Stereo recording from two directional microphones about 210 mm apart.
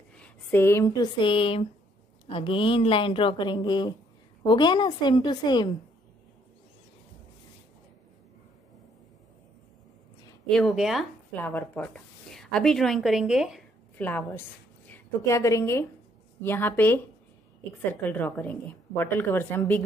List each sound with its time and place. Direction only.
0.1 s a woman's voice: 5° left (ahead or behind)
10.5 s speech: centre (ahead or behind)
14.0 s a woman's voice: 10° left (ahead or behind)
18.0 s a woman's voice: 10° left (ahead or behind)